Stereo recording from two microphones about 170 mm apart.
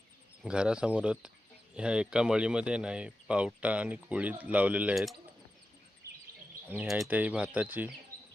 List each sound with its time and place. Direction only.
0.4 s speech: 5° right (ahead or behind)
6.0 s bird vocalization: 20° right (ahead or behind)
6.7 s speech: 10° right (ahead or behind)